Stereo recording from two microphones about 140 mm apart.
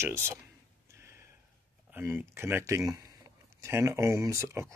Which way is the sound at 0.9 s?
20° right (ahead or behind).